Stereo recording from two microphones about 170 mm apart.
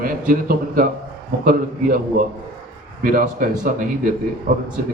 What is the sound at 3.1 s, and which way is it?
A man's voice, 50° right (ahead or behind).